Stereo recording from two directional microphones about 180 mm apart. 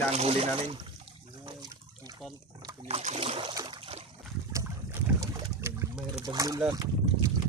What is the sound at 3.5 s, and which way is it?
Splash, 25° right (ahead or behind).